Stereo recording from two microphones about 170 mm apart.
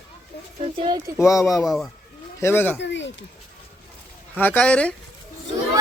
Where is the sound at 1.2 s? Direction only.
20° left (ahead or behind).